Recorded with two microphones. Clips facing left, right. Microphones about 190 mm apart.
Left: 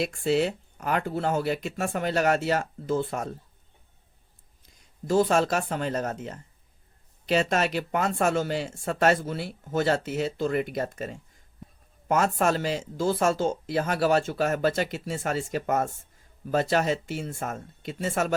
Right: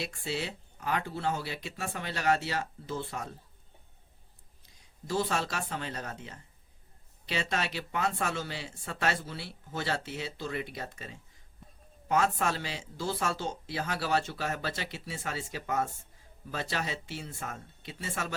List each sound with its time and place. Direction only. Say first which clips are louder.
0.0 s speech: left 11 dB; 50° left (ahead or behind)
5.0 s speech: left 9 dB; 50° left (ahead or behind)